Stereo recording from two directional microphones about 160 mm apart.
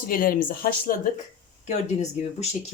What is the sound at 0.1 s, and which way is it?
Speech, 60° left (ahead or behind).